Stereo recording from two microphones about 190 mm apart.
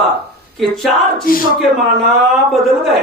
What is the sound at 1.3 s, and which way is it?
Speech, 50° left (ahead or behind).